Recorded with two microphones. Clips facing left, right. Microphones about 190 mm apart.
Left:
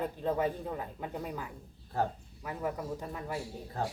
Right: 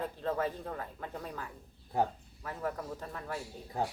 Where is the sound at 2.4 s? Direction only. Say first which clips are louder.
Left 2 dB; 10° left (ahead or behind).